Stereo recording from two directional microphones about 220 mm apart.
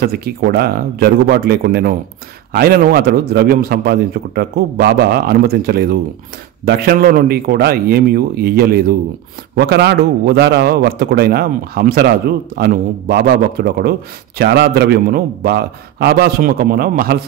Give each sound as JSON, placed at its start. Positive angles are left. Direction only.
{"t": 0.0, "sound": "a man's voice", "side_deg": -45}